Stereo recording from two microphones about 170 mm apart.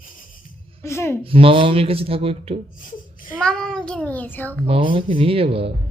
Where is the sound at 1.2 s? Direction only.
35° right (ahead or behind).